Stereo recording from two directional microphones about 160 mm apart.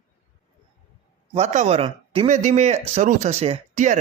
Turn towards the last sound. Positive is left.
turn(degrees=-50)  # may be behind; listen again after turning